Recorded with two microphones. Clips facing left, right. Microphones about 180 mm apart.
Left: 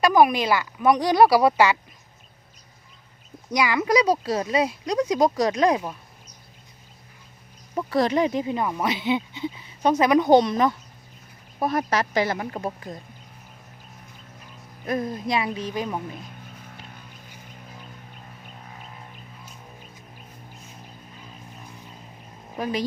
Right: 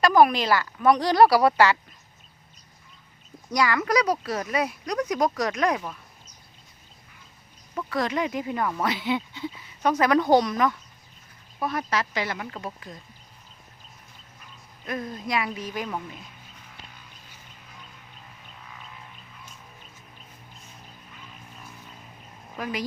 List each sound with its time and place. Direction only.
0.0 s speech: 15° left (ahead or behind)
3.5 s speech: 20° left (ahead or behind)
7.8 s speech: 30° left (ahead or behind)
11.6 s speech: 40° left (ahead or behind)
14.8 s speech: 30° left (ahead or behind)
18.6 s a sound: 40° left (ahead or behind)
22.5 s speech: 30° left (ahead or behind)